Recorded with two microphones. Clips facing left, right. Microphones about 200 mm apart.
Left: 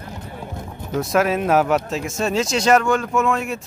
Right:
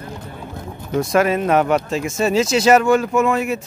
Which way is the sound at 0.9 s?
Centre (ahead or behind).